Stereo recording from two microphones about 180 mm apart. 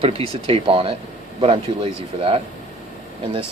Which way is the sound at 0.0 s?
30° right (ahead or behind).